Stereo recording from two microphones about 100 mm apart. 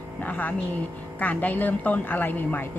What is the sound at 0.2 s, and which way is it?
A woman's voice, 15° left (ahead or behind).